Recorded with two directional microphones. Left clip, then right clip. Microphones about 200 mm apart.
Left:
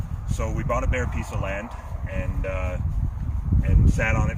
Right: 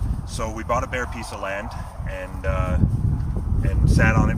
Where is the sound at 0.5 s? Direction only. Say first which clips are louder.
Right 3 dB; centre (ahead or behind).